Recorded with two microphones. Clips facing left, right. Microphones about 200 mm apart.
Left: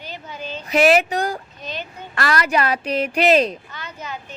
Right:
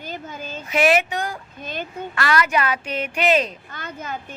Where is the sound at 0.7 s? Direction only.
35° left (ahead or behind).